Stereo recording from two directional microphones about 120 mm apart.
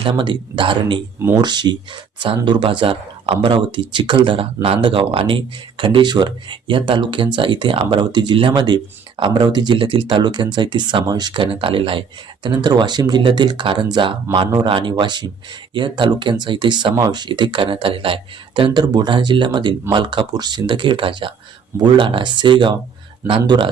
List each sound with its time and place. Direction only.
0.0 s speech: 40° right (ahead or behind)